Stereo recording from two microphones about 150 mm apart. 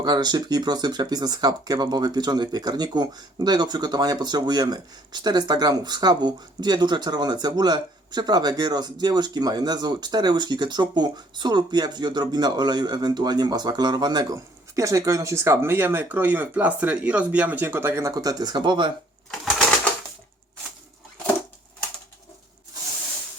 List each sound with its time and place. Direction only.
0.0 s speech: 30° right (ahead or behind)